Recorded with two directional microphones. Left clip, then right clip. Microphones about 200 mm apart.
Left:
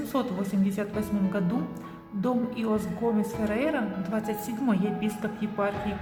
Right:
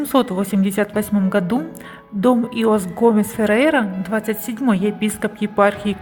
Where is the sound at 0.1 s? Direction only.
45° right (ahead or behind).